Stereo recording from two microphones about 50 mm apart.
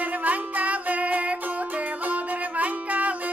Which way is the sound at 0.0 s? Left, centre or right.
Right.